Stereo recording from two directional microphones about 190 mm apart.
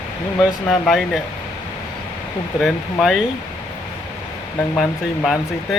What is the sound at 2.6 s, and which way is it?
Speech, centre (ahead or behind).